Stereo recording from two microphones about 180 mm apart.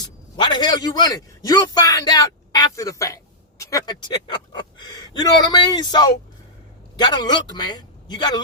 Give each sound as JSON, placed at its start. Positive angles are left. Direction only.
{"t": 0.0, "sound": "a man's voice", "side_deg": 25}